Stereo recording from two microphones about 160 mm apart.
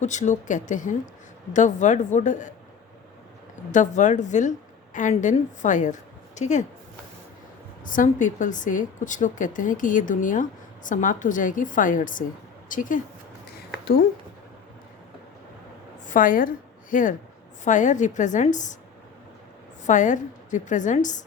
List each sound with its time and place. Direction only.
0.0 s a woman's voice: 50° left (ahead or behind)
3.5 s a woman's voice: 50° left (ahead or behind)
7.9 s speech: 55° left (ahead or behind)
16.0 s a woman's voice: 55° left (ahead or behind)
19.8 s a woman's voice: 50° left (ahead or behind)